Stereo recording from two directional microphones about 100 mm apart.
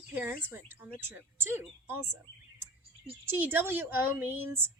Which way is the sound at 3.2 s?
20° right (ahead or behind).